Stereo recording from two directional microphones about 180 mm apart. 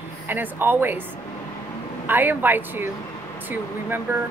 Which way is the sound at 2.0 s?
10° right (ahead or behind).